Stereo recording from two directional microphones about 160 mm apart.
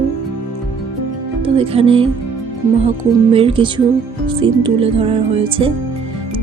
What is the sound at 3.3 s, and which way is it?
Speech, 35° right (ahead or behind).